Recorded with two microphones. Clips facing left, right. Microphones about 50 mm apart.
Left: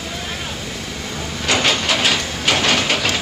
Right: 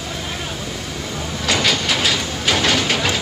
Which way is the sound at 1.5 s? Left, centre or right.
Left.